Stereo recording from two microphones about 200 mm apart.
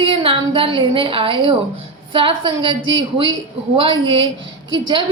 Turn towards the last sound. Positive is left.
turn(degrees=-25)  # may be behind; listen again after turning